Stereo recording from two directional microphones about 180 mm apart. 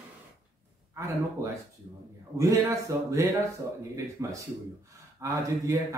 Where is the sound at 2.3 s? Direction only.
15° right (ahead or behind).